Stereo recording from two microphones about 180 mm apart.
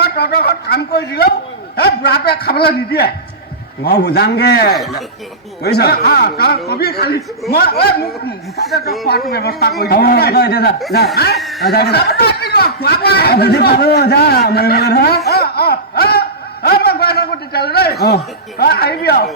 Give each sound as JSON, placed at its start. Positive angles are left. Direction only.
{"t": 0.0, "sound": "a man's voice", "side_deg": 60}
{"t": 4.8, "sound": "speech", "side_deg": 0}
{"t": 5.6, "sound": "speech", "side_deg": 65}
{"t": 9.3, "sound": "speech", "side_deg": 60}
{"t": 16.6, "sound": "a sound", "side_deg": 60}
{"t": 18.0, "sound": "speech", "side_deg": 65}